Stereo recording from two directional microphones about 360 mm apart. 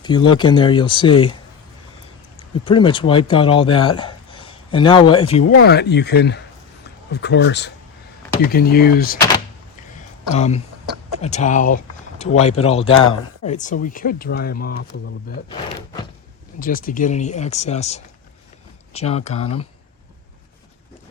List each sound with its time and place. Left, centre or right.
0.0 s speech: centre
2.6 s speech: centre
5.5 s speech: left
10.3 s speech: centre
16.6 s speech: left